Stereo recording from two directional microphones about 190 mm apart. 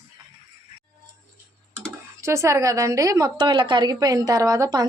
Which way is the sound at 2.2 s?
15° right (ahead or behind).